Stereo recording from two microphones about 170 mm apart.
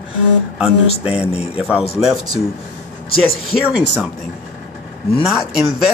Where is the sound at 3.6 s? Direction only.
5° right (ahead or behind).